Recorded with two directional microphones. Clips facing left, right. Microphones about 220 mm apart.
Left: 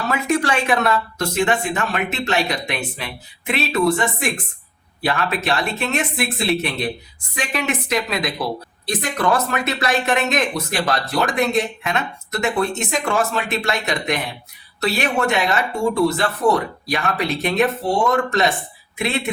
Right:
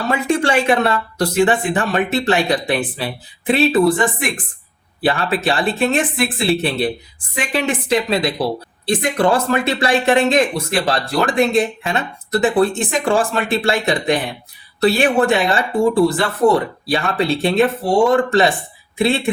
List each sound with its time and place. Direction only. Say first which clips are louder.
0.1 s speech: right 3 dB; 30° right (ahead or behind)